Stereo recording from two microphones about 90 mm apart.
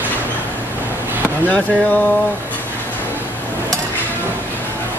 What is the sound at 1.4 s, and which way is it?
Speech, 15° left (ahead or behind).